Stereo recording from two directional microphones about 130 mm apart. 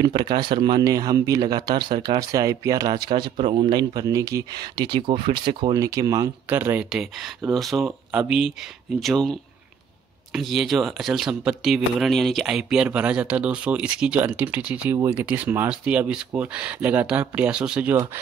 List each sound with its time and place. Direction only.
0.0 s speech: 35° right (ahead or behind); by 6.9 s 15° right (ahead or behind)
6.9 s speech: 5° right (ahead or behind)